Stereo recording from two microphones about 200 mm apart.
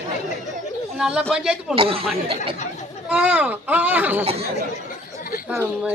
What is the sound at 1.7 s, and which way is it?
Speech, 30° right (ahead or behind).